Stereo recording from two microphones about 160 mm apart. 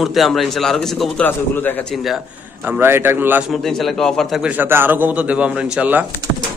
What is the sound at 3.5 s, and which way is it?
A man's voice, centre (ahead or behind).